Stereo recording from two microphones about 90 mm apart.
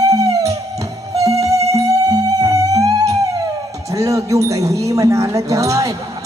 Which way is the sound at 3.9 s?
40° right (ahead or behind).